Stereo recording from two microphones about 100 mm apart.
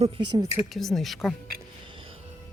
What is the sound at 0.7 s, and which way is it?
Speech, 5° left (ahead or behind).